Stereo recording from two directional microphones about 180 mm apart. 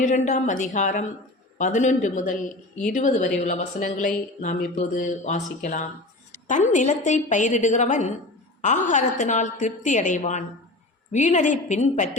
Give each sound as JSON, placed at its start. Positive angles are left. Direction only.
{"t": 0.0, "sound": "speech", "side_deg": 40}